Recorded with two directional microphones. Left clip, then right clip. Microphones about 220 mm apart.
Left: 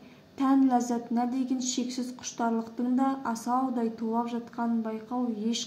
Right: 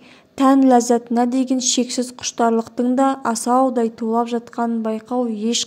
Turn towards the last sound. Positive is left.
turn(degrees=-50)  # may be behind; listen again after turning